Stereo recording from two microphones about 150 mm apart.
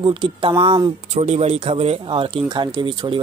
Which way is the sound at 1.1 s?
50° right (ahead or behind).